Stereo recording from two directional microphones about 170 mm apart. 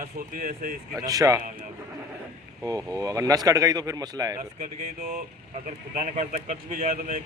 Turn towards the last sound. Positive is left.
turn(degrees=-50)  # may be behind; listen again after turning